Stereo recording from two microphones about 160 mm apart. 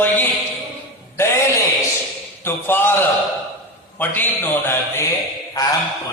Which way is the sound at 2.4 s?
15° left (ahead or behind).